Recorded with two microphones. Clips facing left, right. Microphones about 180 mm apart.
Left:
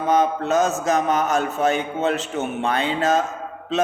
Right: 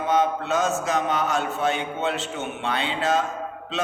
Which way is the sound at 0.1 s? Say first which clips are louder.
Left 3 dB; 40° left (ahead or behind).